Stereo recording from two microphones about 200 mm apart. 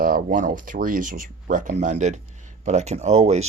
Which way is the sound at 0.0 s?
45° right (ahead or behind).